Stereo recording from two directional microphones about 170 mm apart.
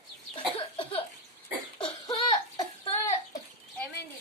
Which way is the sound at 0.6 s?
35° left (ahead or behind).